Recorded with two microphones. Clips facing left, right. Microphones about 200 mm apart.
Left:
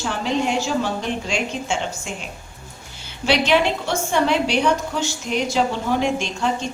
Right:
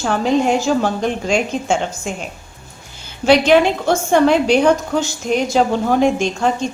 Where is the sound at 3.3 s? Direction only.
45° right (ahead or behind).